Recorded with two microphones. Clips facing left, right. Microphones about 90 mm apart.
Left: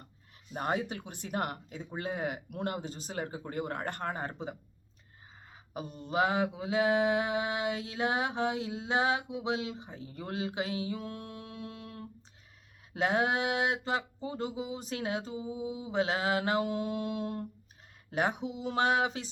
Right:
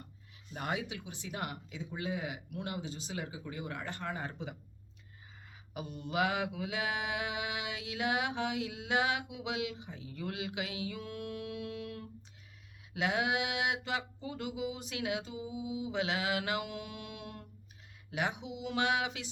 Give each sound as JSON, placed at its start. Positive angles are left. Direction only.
{"t": 0.5, "sound": "speech", "side_deg": 40}
{"t": 5.7, "sound": "mantra", "side_deg": 35}